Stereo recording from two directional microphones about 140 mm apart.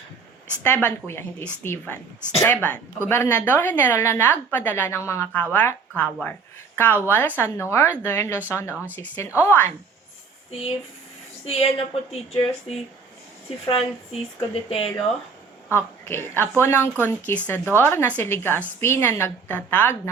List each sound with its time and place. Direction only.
0.6 s a woman's voice: 15° left (ahead or behind)
10.5 s a woman's voice: 45° left (ahead or behind)
14.5 s a woman's voice: 45° left (ahead or behind)
15.7 s a woman's voice: 15° left (ahead or behind)